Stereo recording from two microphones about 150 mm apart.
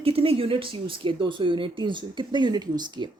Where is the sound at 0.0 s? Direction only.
40° right (ahead or behind).